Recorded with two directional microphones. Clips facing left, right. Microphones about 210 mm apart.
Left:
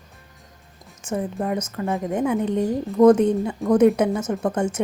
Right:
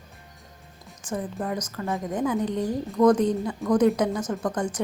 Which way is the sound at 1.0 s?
25° left (ahead or behind).